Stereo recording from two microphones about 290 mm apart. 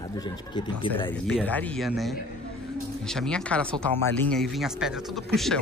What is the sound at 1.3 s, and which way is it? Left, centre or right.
Speech, centre.